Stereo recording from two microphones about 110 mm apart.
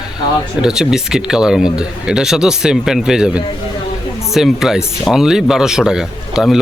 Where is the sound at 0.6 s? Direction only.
5° right (ahead or behind).